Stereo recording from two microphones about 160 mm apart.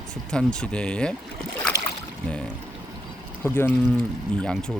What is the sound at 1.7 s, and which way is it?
Boat, 15° right (ahead or behind).